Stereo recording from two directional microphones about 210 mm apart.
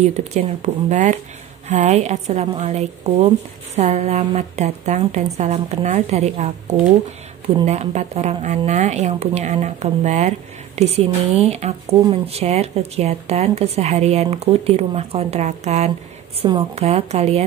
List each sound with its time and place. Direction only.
0.0 s a woman's voice: 30° right (ahead or behind)